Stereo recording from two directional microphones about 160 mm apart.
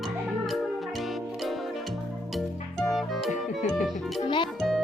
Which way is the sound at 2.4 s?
Centre (ahead or behind).